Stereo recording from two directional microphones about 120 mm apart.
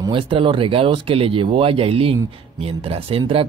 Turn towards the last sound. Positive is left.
turn(degrees=-50)  # may be behind; listen again after turning